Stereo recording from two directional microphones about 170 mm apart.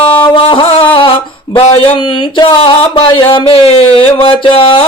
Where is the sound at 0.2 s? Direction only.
30° left (ahead or behind).